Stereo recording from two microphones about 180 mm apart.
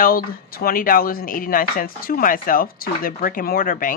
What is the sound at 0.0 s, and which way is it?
Speech, 55° left (ahead or behind).